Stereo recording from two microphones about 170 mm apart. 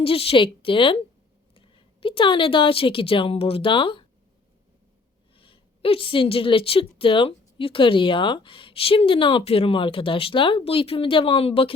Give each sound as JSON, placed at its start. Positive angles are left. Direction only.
{"t": 0.0, "sound": "a woman's voice", "side_deg": 35}
{"t": 5.4, "sound": "a woman's voice", "side_deg": 30}